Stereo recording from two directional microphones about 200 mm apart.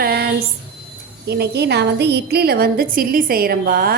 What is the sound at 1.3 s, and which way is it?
A woman's voice, 55° right (ahead or behind).